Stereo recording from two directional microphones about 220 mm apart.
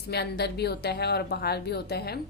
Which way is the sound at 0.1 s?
50° left (ahead or behind).